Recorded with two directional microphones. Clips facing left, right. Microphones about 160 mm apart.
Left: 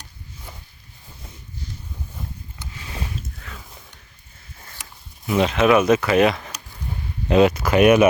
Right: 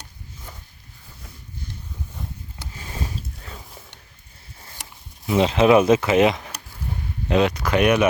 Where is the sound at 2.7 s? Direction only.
40° right (ahead or behind).